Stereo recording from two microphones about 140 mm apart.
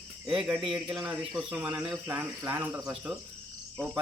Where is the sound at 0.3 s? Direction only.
5° right (ahead or behind).